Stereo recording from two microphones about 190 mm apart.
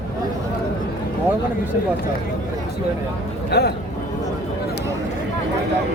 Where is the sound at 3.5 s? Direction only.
60° left (ahead or behind).